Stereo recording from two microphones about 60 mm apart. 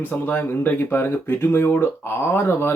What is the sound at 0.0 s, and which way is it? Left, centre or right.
Speech, left.